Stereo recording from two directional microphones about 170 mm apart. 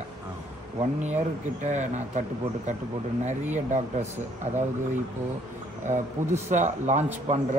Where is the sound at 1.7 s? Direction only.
45° right (ahead or behind).